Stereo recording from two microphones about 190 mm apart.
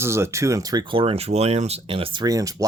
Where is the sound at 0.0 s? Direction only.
15° right (ahead or behind).